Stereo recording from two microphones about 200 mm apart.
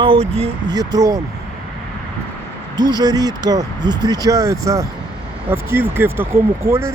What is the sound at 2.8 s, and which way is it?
Speech, 20° right (ahead or behind).